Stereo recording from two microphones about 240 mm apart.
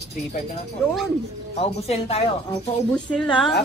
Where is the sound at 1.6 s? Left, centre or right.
Left.